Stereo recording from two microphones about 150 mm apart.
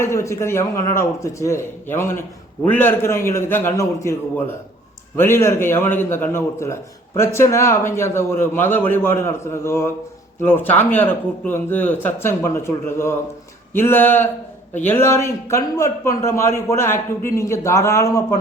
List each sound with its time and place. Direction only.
0.0 s a man's voice: 20° left (ahead or behind)